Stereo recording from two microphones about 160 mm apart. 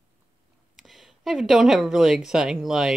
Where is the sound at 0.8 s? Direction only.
Centre (ahead or behind).